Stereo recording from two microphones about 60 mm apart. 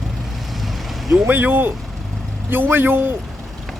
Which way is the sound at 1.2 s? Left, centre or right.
Right.